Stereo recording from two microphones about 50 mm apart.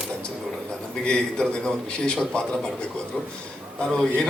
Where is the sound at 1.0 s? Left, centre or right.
Centre.